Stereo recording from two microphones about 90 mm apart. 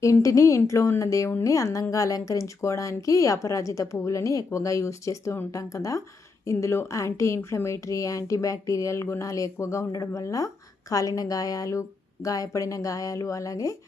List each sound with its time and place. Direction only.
0.0 s a woman's voice: 35° left (ahead or behind)